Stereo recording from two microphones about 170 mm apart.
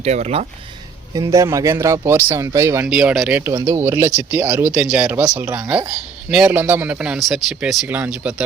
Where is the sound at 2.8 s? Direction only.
5° right (ahead or behind).